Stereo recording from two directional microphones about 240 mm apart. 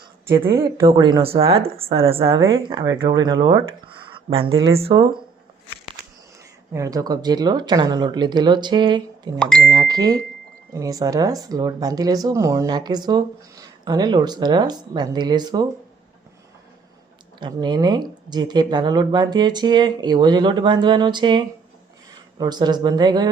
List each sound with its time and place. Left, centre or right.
0.3 s a woman's voice: centre
4.0 s a sound: right
4.8 s a woman's voice: right
6.7 s speech: centre
17.4 s speech: centre